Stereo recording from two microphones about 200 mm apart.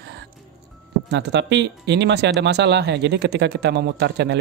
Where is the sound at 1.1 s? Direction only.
60° right (ahead or behind).